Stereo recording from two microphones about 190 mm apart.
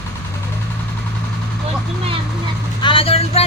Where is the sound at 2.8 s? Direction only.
30° left (ahead or behind).